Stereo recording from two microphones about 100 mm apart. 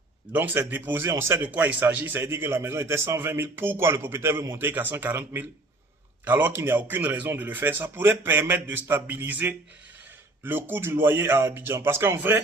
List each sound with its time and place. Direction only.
0.3 s a man's voice: 20° right (ahead or behind)